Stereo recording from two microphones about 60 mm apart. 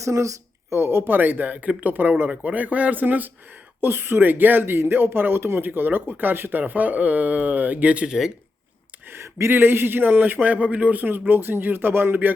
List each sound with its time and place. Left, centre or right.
0.0 s speech: right; by 8.3 s centre
9.1 s speech: right